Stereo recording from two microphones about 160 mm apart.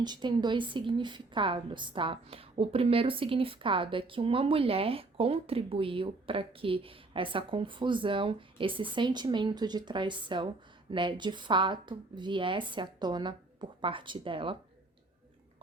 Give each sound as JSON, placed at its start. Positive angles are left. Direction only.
{"t": 0.0, "sound": "a woman's voice", "side_deg": -25}